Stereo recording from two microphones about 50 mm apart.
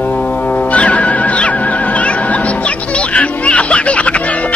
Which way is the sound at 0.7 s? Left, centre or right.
Left.